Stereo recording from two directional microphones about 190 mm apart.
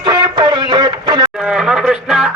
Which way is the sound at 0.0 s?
25° right (ahead or behind).